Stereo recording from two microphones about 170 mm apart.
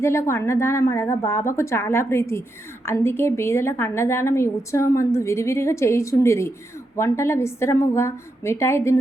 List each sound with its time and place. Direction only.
0.0 s a woman's voice: 15° left (ahead or behind)